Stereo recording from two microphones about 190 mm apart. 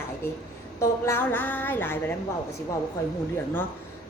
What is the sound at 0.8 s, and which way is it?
A woman's voice, 15° left (ahead or behind).